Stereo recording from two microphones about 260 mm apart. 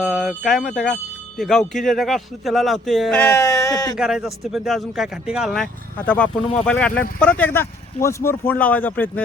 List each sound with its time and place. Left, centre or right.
0.0 s speech: centre
3.9 s speech: centre